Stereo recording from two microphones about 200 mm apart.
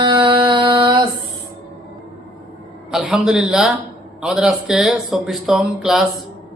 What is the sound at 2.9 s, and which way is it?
A man's voice, 5° right (ahead or behind).